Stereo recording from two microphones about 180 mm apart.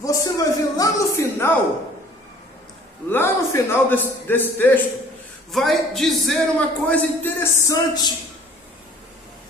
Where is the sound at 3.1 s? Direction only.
10° left (ahead or behind).